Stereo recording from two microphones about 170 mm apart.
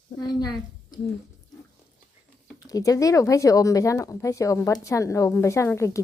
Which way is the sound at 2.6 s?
20° left (ahead or behind).